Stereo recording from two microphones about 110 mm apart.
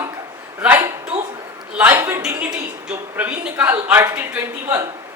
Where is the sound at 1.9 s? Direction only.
25° right (ahead or behind).